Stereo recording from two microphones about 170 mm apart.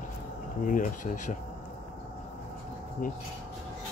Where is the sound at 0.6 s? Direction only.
50° left (ahead or behind).